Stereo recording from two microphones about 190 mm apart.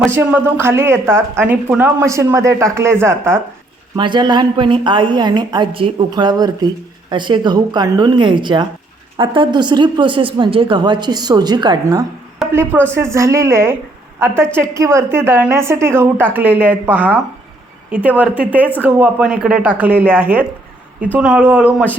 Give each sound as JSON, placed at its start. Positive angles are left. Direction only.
{"t": 0.1, "sound": "a woman's voice", "side_deg": -10}
{"t": 3.9, "sound": "a woman's voice", "side_deg": -25}
{"t": 12.4, "sound": "a sound", "side_deg": 0}
{"t": 12.7, "sound": "speech", "side_deg": 5}
{"t": 13.0, "sound": "a woman's voice", "side_deg": -15}